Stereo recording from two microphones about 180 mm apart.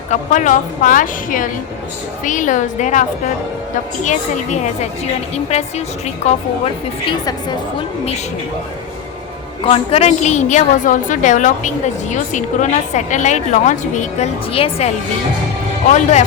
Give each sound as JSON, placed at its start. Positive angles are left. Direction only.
{"t": 0.1, "sound": "a woman's voice", "side_deg": 45}
{"t": 7.1, "sound": "speech", "side_deg": 25}
{"t": 9.6, "sound": "a woman's voice", "side_deg": 30}
{"t": 16.0, "sound": "a woman's voice", "side_deg": 40}